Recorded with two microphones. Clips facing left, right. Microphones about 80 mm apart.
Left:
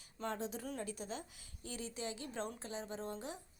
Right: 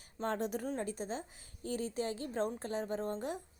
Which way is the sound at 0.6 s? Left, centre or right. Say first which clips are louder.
Right 6 dB; right.